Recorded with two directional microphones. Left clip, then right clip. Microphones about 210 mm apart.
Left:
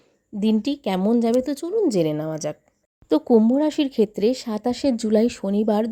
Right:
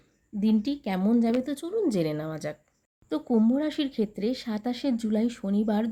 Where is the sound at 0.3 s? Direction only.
40° left (ahead or behind).